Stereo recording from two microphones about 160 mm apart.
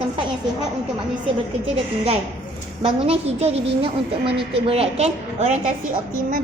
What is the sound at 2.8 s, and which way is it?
A woman's voice, 35° right (ahead or behind).